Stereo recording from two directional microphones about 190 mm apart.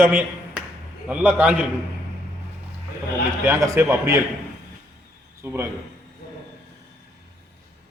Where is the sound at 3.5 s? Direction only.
15° right (ahead or behind).